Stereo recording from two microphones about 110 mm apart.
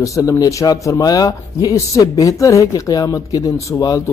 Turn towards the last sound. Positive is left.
turn(degrees=35)  # may be behind; listen again after turning